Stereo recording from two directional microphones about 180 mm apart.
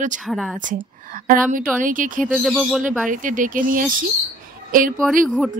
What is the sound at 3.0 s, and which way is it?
Speech, 45° right (ahead or behind).